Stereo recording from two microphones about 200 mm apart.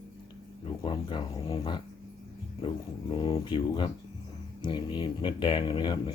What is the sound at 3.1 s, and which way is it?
Speech, 20° left (ahead or behind).